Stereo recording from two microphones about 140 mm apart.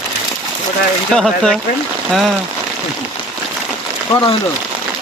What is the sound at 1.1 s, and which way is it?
Speech, 5° left (ahead or behind).